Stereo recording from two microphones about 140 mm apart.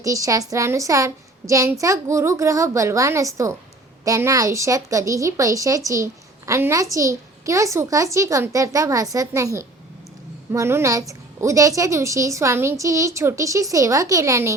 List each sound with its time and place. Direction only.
0.0 s a woman's voice: 25° right (ahead or behind)